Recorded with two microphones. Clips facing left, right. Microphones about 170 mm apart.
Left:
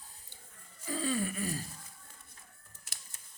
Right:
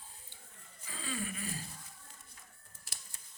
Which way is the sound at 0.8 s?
40° left (ahead or behind).